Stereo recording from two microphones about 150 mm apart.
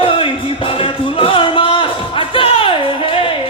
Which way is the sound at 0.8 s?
35° left (ahead or behind).